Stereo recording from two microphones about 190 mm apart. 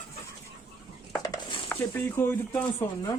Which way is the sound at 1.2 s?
25° left (ahead or behind).